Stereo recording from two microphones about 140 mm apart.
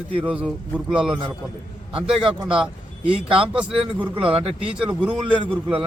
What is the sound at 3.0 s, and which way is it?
Speech, 40° right (ahead or behind).